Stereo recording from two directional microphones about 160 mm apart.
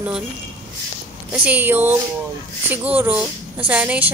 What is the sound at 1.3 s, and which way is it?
A woman's voice, 10° right (ahead or behind).